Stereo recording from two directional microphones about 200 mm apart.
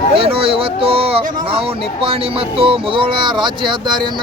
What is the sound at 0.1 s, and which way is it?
Speech, 25° right (ahead or behind).